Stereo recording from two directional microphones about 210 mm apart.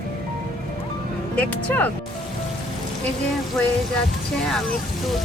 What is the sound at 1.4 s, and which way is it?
Speech, 5° left (ahead or behind).